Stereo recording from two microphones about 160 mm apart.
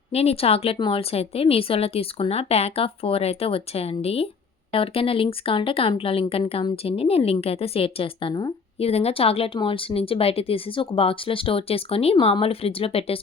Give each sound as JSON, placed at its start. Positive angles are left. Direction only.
{"t": 0.1, "sound": "speech", "side_deg": 40}
{"t": 8.8, "sound": "speech", "side_deg": 40}